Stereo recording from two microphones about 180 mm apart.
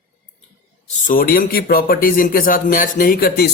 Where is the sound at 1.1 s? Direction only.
50° left (ahead or behind).